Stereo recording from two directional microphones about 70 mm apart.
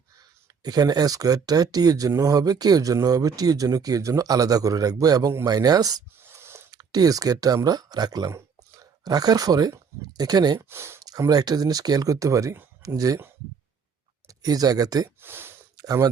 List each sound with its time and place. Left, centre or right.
0.2 s speech: right
6.1 s snort: right
6.7 s speech: right
10.7 s speech: right
11.0 s speech: right
14.3 s speech: right
15.2 s a sound: right
15.8 s speech: right